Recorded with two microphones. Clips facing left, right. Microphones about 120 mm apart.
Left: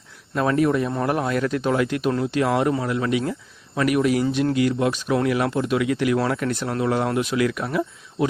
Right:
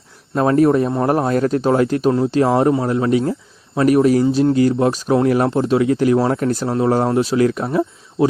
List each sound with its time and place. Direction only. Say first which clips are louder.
0.3 s a man's voice: right 6 dB; 35° right (ahead or behind)